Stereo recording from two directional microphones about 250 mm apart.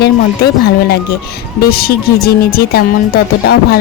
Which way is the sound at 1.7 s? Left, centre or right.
Left.